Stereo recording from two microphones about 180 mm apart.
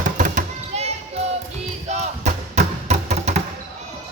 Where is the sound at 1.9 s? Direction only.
40° right (ahead or behind).